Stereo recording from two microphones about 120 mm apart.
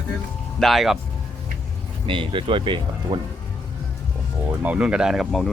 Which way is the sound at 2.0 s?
45° right (ahead or behind).